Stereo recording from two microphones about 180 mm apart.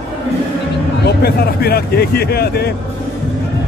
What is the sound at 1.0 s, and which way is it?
Speech, 60° left (ahead or behind).